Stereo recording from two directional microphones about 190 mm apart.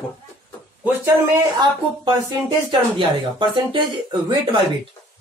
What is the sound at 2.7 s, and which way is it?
Speech, 25° right (ahead or behind).